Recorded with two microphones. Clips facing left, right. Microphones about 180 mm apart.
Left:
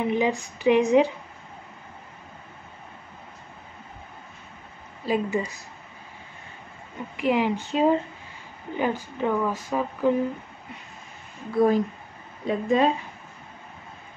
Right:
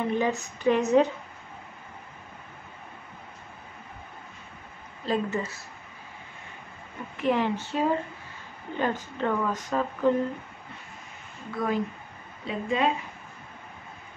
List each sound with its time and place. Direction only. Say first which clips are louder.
0.0 s speech: left 3 dB; 15° left (ahead or behind)
5.0 s speech: left 3 dB; 10° left (ahead or behind)
7.2 s speech: left 2 dB; 10° left (ahead or behind)
11.5 s a woman's voice: left 8 dB; 35° left (ahead or behind)